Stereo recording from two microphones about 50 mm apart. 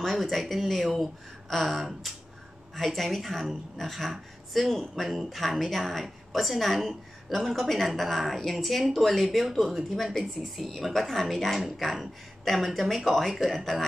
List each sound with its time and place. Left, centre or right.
0.0 s a woman's voice: centre